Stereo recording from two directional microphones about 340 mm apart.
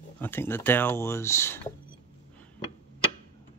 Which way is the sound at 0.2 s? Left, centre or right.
Centre.